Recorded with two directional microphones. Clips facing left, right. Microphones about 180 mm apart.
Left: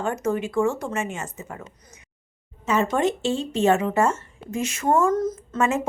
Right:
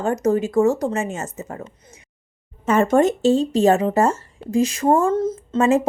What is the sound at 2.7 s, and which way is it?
Speech, 50° right (ahead or behind).